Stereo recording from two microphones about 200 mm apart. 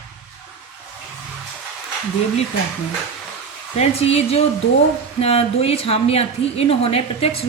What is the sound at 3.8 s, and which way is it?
A woman's voice, 30° left (ahead or behind).